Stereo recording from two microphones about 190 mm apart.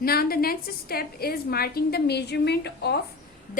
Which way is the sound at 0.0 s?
55° left (ahead or behind).